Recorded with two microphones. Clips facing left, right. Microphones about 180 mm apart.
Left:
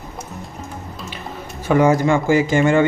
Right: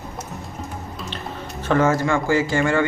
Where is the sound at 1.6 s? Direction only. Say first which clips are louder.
Left 4 dB; 15° left (ahead or behind).